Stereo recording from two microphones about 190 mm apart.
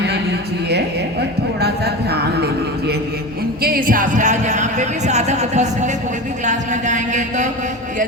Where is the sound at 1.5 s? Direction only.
60° right (ahead or behind).